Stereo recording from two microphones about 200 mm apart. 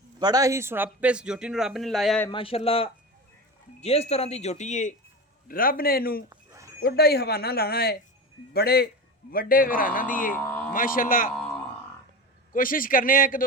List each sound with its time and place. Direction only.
0.2 s a man's voice: 20° right (ahead or behind); by 2.2 s centre (ahead or behind)
2.3 s speech: 25° left (ahead or behind); by 6.2 s 50° left (ahead or behind)
6.3 s a sound: 15° right (ahead or behind)
6.7 s speech: 50° left (ahead or behind)
10.3 s speech: 10° left (ahead or behind)
10.7 s speech: 45° left (ahead or behind)
12.5 s speech: 45° left (ahead or behind)